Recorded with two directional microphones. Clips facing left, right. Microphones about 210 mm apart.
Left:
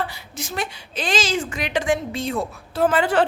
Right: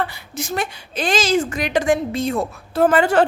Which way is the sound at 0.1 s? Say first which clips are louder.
Right 5 dB; 50° right (ahead or behind).